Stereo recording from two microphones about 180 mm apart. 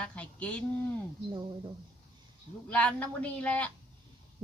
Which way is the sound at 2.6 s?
5° left (ahead or behind).